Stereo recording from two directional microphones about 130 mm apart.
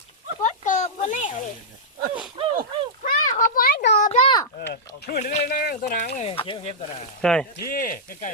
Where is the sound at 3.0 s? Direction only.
90° left.